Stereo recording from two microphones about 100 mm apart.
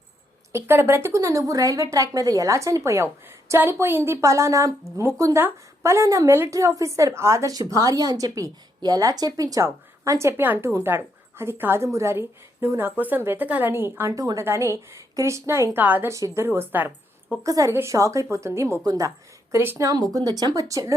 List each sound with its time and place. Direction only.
0.5 s a woman's voice: 25° right (ahead or behind)
14.2 s a woman's voice: 35° right (ahead or behind); by 16.1 s 20° right (ahead or behind)
16.1 s a woman's voice: 30° right (ahead or behind)
17.4 s a woman's voice: 35° right (ahead or behind)